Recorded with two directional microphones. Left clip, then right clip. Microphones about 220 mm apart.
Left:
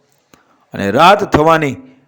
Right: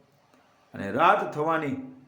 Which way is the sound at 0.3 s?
45° left (ahead or behind).